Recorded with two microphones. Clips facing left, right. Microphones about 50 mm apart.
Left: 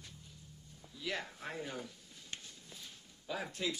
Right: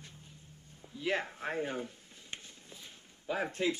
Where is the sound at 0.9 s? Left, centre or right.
Right.